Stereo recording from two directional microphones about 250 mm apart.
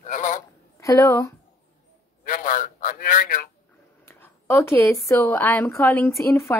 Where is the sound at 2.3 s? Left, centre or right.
Left.